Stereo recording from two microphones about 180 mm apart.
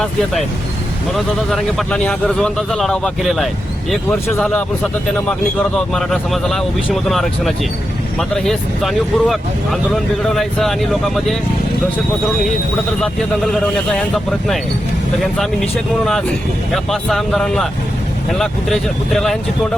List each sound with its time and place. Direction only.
1.1 s a man's voice: centre (ahead or behind)
13.0 s a man's voice: centre (ahead or behind)
16.7 s a man's voice: centre (ahead or behind)